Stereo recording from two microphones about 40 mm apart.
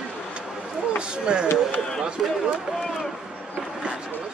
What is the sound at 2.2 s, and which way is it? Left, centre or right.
Speech, centre.